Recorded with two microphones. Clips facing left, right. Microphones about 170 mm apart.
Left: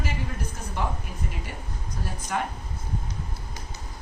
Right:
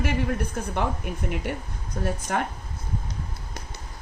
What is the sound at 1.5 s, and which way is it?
Speech, 60° right (ahead or behind).